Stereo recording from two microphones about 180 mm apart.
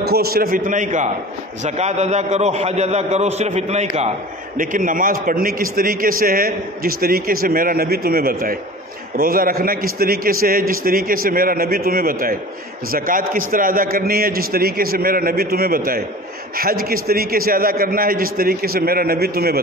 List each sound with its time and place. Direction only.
0.0 s a man's voice: 60° right (ahead or behind); by 3.8 s 40° right (ahead or behind)
4.6 s a man's voice: 50° right (ahead or behind)